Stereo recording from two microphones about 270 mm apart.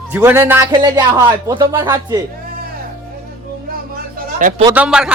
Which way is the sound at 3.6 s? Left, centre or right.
Right.